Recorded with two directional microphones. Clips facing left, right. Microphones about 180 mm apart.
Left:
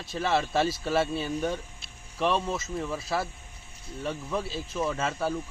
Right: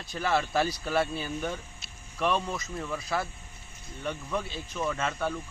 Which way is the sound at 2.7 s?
5° left (ahead or behind).